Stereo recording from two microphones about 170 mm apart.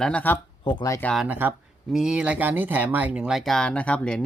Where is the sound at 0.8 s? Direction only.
20° left (ahead or behind).